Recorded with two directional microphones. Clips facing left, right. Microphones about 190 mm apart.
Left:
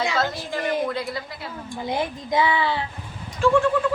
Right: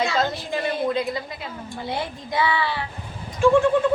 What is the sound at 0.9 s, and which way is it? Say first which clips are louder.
Speech: right 4 dB; 20° right (ahead or behind).